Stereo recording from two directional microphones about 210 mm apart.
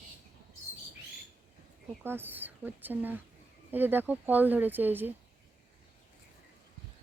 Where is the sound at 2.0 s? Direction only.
10° right (ahead or behind).